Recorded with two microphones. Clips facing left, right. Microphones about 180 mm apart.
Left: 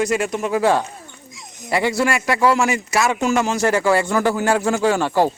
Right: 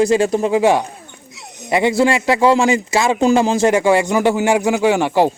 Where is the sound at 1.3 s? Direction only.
70° right (ahead or behind).